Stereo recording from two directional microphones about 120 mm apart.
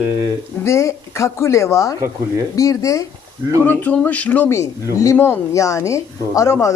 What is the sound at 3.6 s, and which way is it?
Speech, 15° left (ahead or behind).